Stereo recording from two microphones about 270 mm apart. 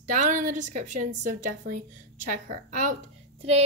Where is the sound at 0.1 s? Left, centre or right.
Right.